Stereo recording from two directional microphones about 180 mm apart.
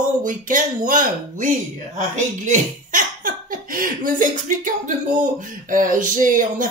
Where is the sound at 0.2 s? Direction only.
45° right (ahead or behind).